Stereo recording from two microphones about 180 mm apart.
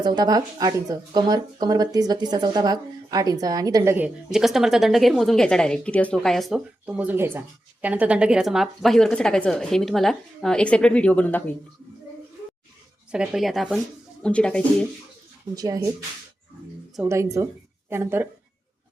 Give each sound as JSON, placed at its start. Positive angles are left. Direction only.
{"t": 0.0, "sound": "speech", "side_deg": -25}
{"t": 13.1, "sound": "speech", "side_deg": -5}
{"t": 15.5, "sound": "speech", "side_deg": -20}
{"t": 16.9, "sound": "a woman's voice", "side_deg": -15}